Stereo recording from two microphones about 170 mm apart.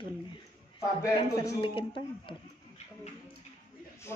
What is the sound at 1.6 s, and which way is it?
Speech, 30° left (ahead or behind).